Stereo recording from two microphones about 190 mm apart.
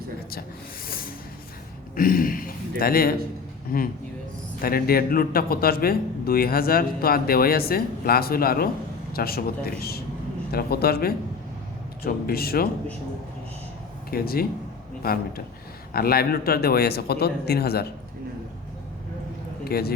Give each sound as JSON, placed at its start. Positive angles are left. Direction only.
{"t": 2.0, "sound": "a man's voice", "side_deg": 50}
{"t": 14.1, "sound": "a man's voice", "side_deg": 55}
{"t": 19.6, "sound": "a man's voice", "side_deg": 55}